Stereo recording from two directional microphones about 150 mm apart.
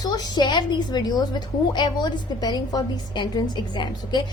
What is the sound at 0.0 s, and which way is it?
A woman's voice, 30° left (ahead or behind).